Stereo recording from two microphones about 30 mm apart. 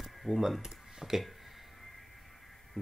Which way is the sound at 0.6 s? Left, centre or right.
Centre.